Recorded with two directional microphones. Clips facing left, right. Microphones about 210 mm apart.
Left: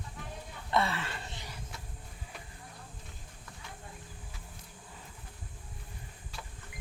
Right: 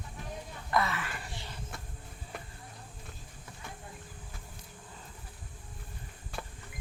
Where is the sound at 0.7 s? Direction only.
25° left (ahead or behind).